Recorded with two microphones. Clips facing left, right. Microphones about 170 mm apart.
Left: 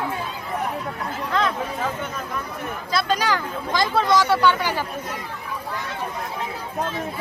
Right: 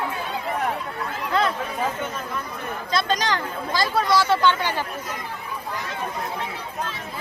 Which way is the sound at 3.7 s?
20° left (ahead or behind).